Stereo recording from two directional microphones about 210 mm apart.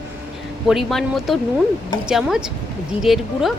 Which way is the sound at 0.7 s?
Centre (ahead or behind).